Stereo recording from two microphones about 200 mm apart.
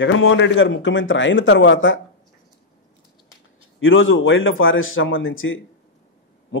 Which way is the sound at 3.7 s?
75° left (ahead or behind).